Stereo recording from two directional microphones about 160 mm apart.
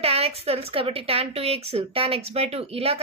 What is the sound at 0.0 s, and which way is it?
Speech, 40° right (ahead or behind).